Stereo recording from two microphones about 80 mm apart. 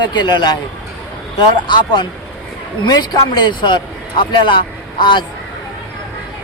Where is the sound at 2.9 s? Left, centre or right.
Left.